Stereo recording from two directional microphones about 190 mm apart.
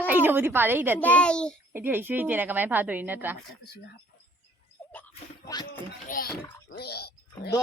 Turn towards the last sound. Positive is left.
turn(degrees=55)  # may be behind; listen again after turning